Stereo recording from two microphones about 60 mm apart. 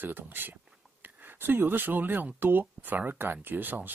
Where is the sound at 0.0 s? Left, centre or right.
Right.